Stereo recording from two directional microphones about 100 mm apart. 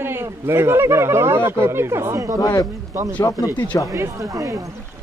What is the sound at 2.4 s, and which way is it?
Speech, 35° left (ahead or behind).